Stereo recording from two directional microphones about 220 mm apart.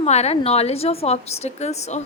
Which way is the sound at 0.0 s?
30° left (ahead or behind).